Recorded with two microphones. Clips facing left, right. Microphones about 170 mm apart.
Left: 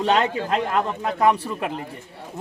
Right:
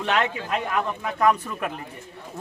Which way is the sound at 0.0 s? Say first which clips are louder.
Left 4 dB; 35° left (ahead or behind).